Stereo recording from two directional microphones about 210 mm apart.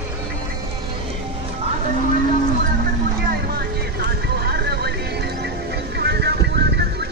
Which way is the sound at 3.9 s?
50° right (ahead or behind).